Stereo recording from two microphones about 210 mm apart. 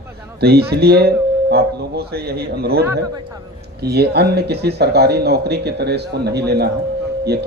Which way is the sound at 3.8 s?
50° right (ahead or behind).